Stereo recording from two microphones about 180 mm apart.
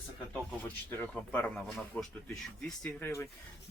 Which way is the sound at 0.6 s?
10° left (ahead or behind).